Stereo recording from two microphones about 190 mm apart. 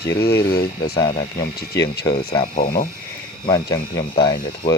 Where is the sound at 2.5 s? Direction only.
50° left (ahead or behind).